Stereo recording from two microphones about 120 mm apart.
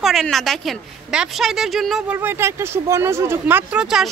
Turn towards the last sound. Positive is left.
turn(degrees=-5)  # may be behind; listen again after turning